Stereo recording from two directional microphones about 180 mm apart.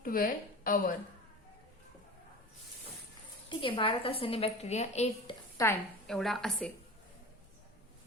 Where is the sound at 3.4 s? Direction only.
30° left (ahead or behind).